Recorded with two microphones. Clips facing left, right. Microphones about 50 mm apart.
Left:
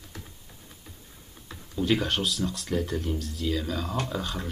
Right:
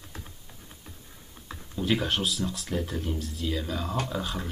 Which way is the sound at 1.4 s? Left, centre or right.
Centre.